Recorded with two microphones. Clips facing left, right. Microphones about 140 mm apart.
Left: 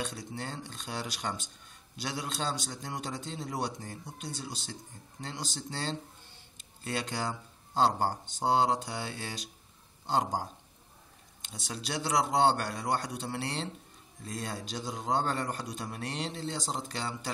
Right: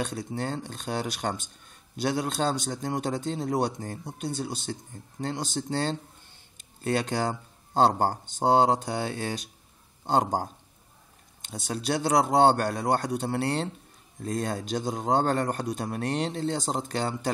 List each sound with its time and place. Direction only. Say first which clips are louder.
0.0 s a man's voice: right 7 dB; 50° right (ahead or behind)